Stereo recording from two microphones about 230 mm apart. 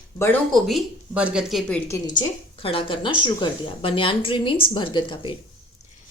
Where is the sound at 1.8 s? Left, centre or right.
Centre.